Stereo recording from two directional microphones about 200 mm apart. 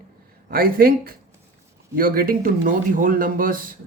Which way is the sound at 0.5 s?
45° right (ahead or behind).